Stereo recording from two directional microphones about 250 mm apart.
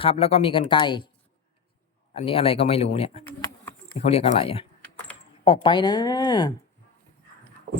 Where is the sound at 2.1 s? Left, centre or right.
Left.